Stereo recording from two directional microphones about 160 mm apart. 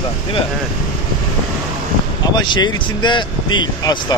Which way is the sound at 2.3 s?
30° left (ahead or behind).